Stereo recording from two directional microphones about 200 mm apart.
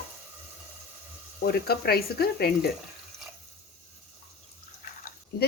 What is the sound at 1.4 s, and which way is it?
Speech, 50° left (ahead or behind).